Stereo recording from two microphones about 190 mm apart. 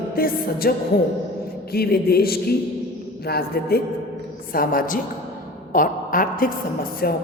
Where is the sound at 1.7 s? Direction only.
55° left (ahead or behind).